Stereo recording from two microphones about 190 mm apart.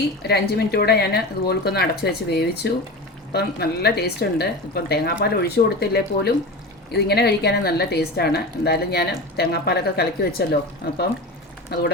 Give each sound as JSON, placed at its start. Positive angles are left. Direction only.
{"t": 0.2, "sound": "a woman's voice", "side_deg": 60}